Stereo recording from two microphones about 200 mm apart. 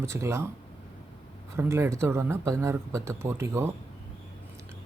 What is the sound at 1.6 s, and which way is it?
Speech, 15° right (ahead or behind).